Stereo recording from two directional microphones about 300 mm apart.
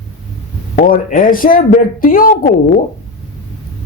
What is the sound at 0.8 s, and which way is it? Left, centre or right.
A man's voice, left.